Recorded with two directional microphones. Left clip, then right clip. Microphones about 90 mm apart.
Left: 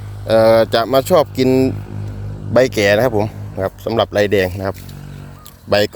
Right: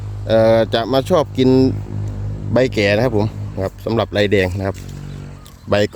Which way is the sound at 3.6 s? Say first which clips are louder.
Left 3 dB; 40° right (ahead or behind).